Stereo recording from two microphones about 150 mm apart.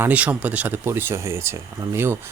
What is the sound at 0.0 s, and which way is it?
Speech, 10° right (ahead or behind).